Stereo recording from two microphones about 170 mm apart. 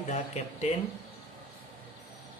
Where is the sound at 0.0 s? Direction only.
40° left (ahead or behind).